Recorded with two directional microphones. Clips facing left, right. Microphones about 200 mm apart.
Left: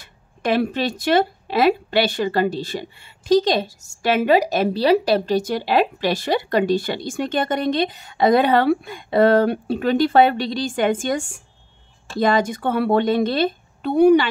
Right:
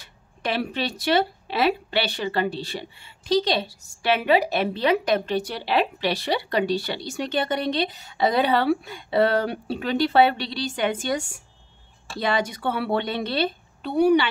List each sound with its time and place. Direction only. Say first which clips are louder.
0.0 s a woman's voice: left 5 dB; 50° left (ahead or behind)